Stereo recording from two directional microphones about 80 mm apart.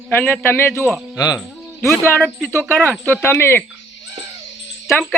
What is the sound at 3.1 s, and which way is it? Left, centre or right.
Speech, left.